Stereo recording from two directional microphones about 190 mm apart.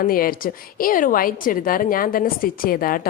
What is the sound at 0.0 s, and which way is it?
A woman's voice, 50° left (ahead or behind).